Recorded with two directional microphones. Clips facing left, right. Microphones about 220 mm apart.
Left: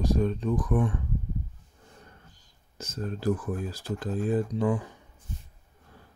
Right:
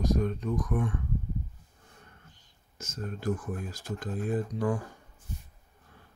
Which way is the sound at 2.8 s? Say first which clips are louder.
Left 4 dB; 30° left (ahead or behind).